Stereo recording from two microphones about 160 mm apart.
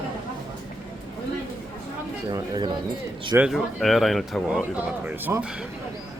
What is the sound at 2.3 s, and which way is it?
Speech, 25° right (ahead or behind).